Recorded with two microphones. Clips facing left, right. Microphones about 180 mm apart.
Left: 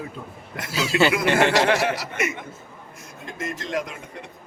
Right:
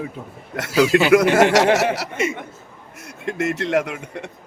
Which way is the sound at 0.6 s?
80° right.